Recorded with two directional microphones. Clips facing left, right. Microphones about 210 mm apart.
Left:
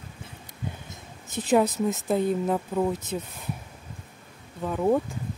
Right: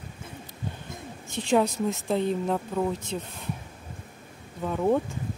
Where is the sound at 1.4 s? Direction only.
5° left (ahead or behind).